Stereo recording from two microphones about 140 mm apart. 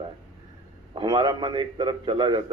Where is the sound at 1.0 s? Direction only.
30° right (ahead or behind).